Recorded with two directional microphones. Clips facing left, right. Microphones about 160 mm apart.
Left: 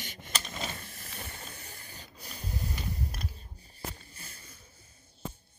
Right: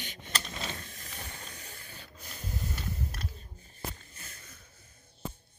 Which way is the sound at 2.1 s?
15° left (ahead or behind).